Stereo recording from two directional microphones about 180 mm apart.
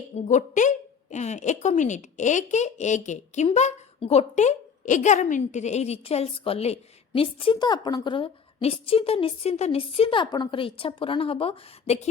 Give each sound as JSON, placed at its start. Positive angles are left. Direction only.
{"t": 0.2, "sound": "a woman's voice", "side_deg": 45}